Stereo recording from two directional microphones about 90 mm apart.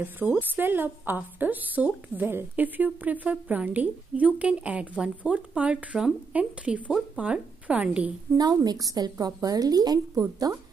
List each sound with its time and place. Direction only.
0.0 s a woman's voice: 20° right (ahead or behind)
8.4 s a woman's voice: 45° right (ahead or behind)